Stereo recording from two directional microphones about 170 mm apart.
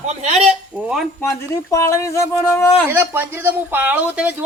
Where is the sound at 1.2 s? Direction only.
15° left (ahead or behind).